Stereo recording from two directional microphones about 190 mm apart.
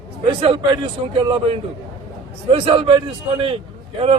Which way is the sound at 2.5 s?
25° right (ahead or behind).